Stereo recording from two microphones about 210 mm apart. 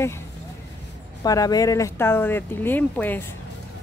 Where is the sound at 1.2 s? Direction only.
15° left (ahead or behind).